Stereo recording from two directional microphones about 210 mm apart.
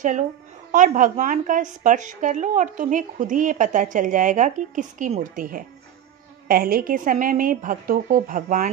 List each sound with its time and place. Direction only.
0.7 s a woman's voice: 40° right (ahead or behind)